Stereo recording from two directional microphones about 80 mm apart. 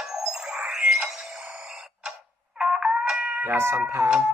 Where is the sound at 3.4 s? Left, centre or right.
Right.